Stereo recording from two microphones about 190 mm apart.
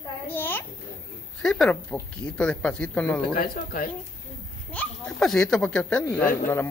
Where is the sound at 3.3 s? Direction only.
50° left (ahead or behind).